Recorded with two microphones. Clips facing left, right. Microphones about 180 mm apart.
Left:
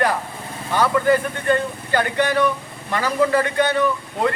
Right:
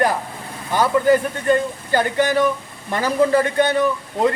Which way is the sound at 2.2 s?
40° right (ahead or behind).